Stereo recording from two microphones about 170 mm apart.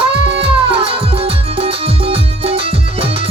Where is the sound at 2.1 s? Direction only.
35° right (ahead or behind).